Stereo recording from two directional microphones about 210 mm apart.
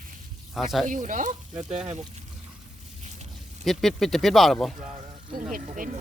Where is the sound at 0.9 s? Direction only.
40° right (ahead or behind).